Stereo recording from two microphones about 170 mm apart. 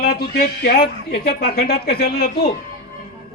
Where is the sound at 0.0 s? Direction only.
65° left (ahead or behind).